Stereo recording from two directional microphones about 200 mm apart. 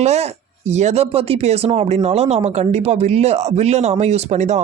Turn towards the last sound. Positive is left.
turn(degrees=-35)  # may be behind; listen again after turning